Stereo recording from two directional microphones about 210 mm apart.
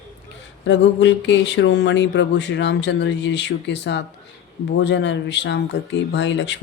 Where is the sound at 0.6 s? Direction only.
60° left (ahead or behind).